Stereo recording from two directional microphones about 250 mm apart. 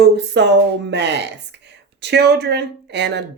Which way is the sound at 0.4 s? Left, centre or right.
Right.